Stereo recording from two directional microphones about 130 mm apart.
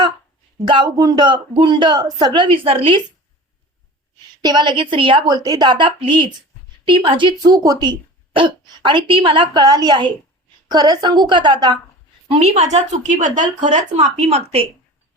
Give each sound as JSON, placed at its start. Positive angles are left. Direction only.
{"t": 0.7, "sound": "a woman's voice", "side_deg": -30}
{"t": 4.4, "sound": "a woman's voice", "side_deg": -35}
{"t": 12.3, "sound": "a woman's voice", "side_deg": -55}